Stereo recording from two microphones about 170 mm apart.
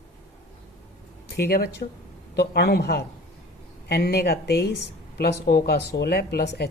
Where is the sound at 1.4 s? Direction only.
70° left (ahead or behind).